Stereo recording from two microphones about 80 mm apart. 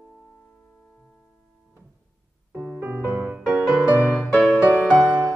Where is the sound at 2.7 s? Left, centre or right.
Centre.